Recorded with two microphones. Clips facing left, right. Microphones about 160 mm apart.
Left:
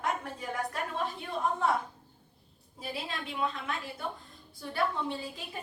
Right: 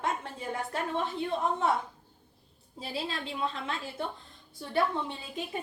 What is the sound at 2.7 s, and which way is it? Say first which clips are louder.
A woman's voice: right 2 dB; 30° right (ahead or behind).